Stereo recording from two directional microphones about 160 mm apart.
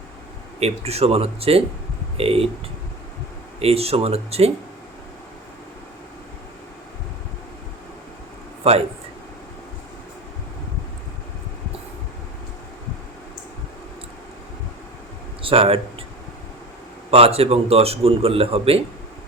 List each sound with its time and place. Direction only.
0.6 s a man's voice: 40° right (ahead or behind)
3.6 s a man's voice: 40° right (ahead or behind)
15.4 s a sound: 35° right (ahead or behind)
17.1 s a man's voice: 40° right (ahead or behind)